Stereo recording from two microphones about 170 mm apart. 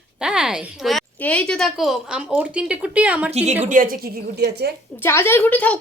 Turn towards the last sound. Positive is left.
turn(degrees=10)  # may be behind; listen again after turning